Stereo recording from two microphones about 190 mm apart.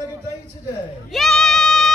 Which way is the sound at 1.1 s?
Centre (ahead or behind).